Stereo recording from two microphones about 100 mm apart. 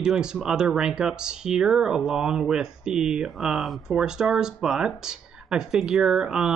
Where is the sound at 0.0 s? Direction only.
5° right (ahead or behind).